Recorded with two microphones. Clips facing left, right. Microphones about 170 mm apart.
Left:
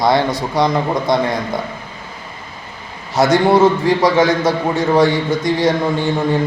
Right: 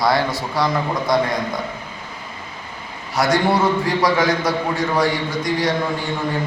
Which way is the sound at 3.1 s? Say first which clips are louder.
Left 5 dB; 20° left (ahead or behind).